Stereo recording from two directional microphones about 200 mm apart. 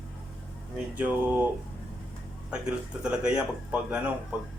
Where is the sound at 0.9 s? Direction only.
5° right (ahead or behind).